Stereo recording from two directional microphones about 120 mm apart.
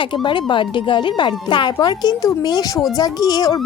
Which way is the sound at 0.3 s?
45° left (ahead or behind).